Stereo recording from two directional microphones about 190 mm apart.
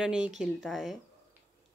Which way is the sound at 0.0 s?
5° right (ahead or behind).